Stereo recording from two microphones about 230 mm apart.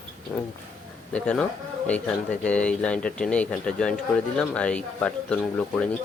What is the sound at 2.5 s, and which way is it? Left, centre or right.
Speech, centre.